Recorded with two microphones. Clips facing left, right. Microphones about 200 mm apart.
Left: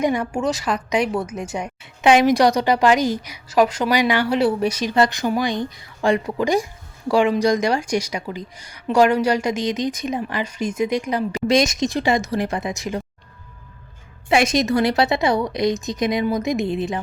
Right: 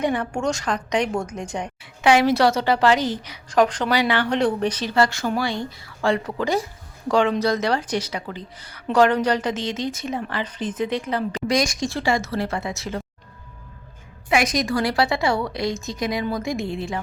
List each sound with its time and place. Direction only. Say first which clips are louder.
0.0 s a woman's voice: left 2 dB; 10° left (ahead or behind)
14.3 s a woman's voice: left 3 dB; 25° left (ahead or behind)